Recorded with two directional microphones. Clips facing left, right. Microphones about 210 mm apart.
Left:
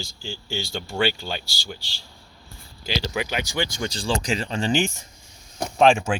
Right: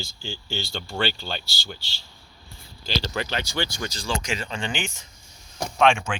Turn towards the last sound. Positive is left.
turn(degrees=35)  # may be behind; listen again after turning